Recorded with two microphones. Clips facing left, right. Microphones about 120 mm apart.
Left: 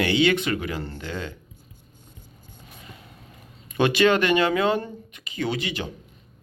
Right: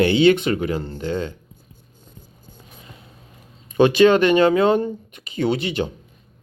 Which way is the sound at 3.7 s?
20° right (ahead or behind).